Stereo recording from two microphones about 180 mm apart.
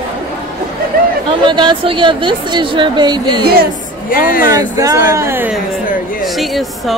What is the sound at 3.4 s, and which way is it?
Speech, 55° right (ahead or behind).